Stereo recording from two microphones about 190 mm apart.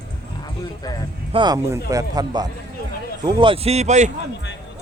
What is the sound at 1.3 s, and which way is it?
A man's voice, 25° right (ahead or behind).